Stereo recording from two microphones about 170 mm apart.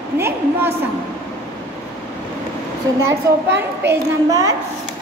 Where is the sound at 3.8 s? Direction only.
15° right (ahead or behind).